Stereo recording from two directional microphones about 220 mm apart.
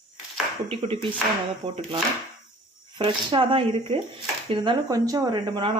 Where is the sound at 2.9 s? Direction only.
20° right (ahead or behind).